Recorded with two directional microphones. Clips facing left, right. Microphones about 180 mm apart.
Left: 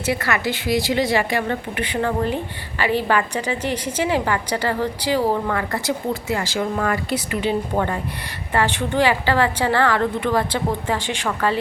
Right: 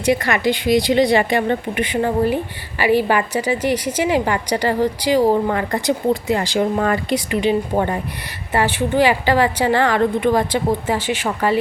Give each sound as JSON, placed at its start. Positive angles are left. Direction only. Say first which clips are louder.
{"t": 0.0, "sound": "a woman's voice", "louder": "right 5 dB", "side_deg": -20}